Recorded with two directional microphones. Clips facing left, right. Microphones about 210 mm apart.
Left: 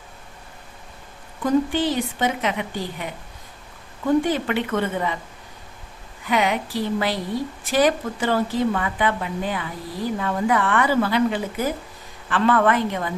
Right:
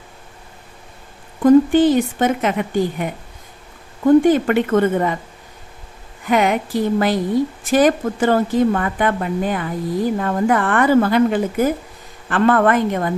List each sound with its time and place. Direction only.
1.5 s a woman's voice: 50° right (ahead or behind)
4.2 s a woman's voice: 50° right (ahead or behind)
6.2 s a woman's voice: 50° right (ahead or behind)